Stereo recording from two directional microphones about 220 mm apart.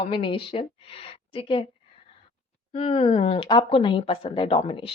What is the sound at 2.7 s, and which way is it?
Speech, 25° left (ahead or behind).